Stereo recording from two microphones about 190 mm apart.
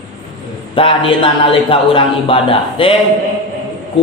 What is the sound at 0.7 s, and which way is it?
Speech, 25° left (ahead or behind).